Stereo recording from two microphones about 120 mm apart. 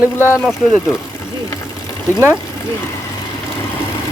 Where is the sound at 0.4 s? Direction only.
Centre (ahead or behind).